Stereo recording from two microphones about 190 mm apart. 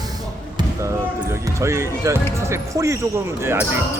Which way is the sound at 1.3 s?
15° right (ahead or behind).